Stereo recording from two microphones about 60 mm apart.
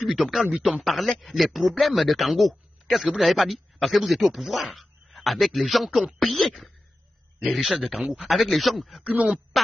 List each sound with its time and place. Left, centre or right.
0.0 s a man's voice: centre
9.0 s speech: right